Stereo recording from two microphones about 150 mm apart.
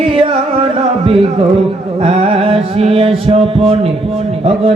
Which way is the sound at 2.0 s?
35° right (ahead or behind).